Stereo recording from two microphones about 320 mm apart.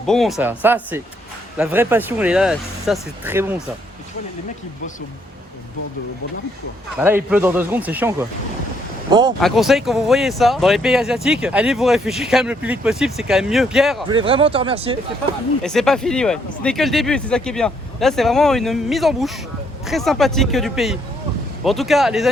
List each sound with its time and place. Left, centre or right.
0.0 s speech: centre
7.0 s speech: centre
9.4 s speech: centre
14.1 s speech: centre
15.6 s speech: centre